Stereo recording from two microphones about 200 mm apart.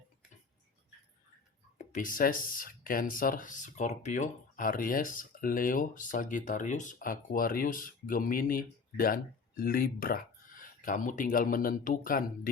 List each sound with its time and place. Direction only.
1.9 s speech: 40° left (ahead or behind)